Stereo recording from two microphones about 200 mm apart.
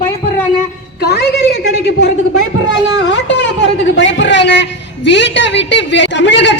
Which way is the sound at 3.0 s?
65° left (ahead or behind).